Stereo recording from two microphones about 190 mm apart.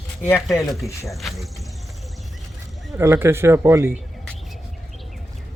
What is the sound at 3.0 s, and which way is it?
Speech, 15° right (ahead or behind).